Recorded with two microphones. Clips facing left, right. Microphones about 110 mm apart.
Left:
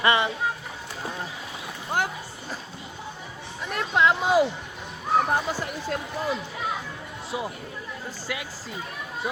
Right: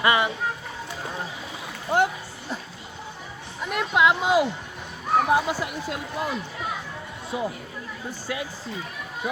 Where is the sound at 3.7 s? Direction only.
10° right (ahead or behind).